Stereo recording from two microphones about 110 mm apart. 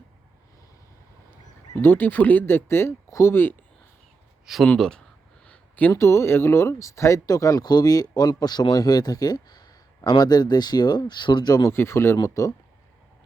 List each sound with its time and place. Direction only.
1.7 s speech: 20° left (ahead or behind)
4.4 s speech: centre (ahead or behind)
5.5 s a sound: 15° left (ahead or behind)
5.9 s speech: 25° left (ahead or behind)